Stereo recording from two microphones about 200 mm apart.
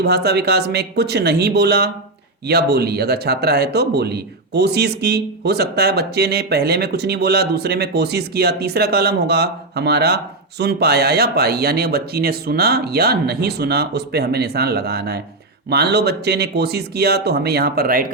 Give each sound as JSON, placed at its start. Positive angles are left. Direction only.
{"t": 0.0, "sound": "speech", "side_deg": -55}